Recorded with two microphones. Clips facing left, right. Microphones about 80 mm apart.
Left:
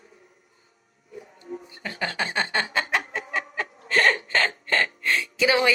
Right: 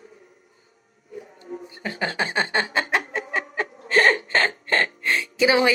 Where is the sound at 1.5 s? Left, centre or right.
Right.